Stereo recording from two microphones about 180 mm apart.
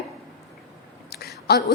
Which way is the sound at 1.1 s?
60° left (ahead or behind).